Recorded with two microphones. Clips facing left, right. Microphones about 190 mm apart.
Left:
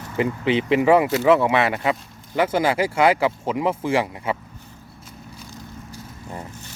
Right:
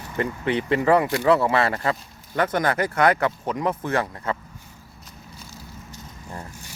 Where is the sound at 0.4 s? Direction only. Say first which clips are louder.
Left 3 dB; 90° left.